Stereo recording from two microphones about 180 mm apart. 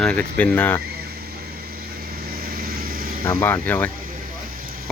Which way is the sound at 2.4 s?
55° right (ahead or behind).